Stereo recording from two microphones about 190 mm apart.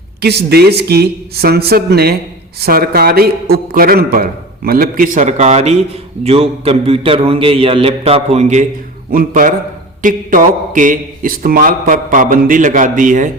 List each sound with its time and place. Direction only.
0.2 s a man's voice: 60° right (ahead or behind)